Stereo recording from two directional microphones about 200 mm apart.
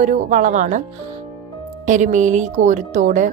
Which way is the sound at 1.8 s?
40° right (ahead or behind).